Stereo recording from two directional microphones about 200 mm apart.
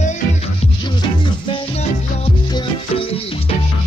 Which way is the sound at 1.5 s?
30° left (ahead or behind).